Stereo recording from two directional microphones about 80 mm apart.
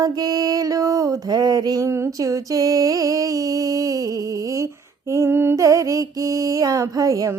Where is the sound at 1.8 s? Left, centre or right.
Right.